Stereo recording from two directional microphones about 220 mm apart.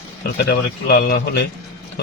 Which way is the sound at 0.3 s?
45° left (ahead or behind).